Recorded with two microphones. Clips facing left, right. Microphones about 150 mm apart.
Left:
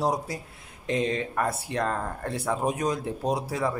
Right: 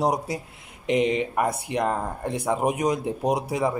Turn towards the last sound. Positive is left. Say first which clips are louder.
# right 3 dB
turn(degrees=-15)  # may be behind; listen again after turning